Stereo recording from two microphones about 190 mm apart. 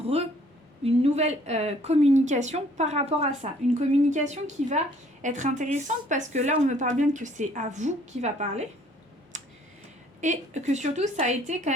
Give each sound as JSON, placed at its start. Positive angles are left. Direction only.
{"t": 0.0, "sound": "a sound", "side_deg": -30}
{"t": 0.9, "sound": "a woman's voice", "side_deg": -35}
{"t": 9.3, "sound": "clicking", "side_deg": -40}
{"t": 10.2, "sound": "a woman's voice", "side_deg": -40}